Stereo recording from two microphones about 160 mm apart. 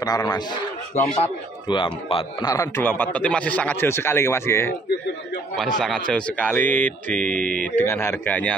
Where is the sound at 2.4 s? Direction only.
20° left (ahead or behind).